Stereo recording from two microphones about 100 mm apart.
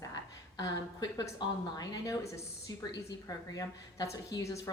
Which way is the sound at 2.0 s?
35° left (ahead or behind).